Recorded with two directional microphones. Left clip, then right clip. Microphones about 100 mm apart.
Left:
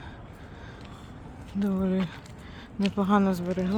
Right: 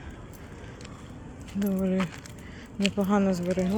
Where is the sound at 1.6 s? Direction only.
25° left (ahead or behind).